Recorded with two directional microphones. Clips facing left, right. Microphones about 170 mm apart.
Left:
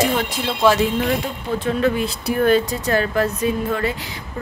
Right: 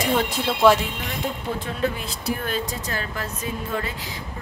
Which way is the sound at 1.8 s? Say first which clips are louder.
Left 7 dB; 65° left (ahead or behind).